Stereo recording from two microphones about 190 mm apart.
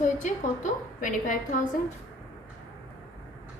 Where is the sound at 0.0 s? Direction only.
40° left (ahead or behind).